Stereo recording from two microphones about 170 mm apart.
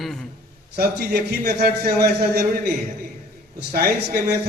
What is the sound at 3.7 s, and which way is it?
Speech, 65° right (ahead or behind).